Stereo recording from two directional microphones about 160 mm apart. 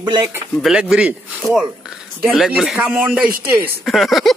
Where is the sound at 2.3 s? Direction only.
Centre (ahead or behind).